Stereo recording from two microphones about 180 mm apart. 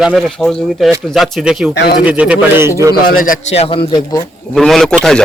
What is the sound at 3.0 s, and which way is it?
Speech, 50° left (ahead or behind).